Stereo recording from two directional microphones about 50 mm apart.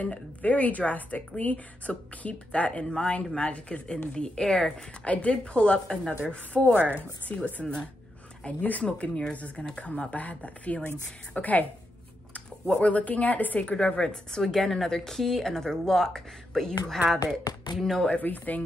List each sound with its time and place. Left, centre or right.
0.0 s a woman's voice: left; by 4.7 s centre
5.0 s a woman's voice: left
6.7 s speech: right
7.6 s speech: centre
8.5 s a woman's voice: left
13.7 s a woman's voice: centre
14.4 s speech: centre
18.1 s speech: left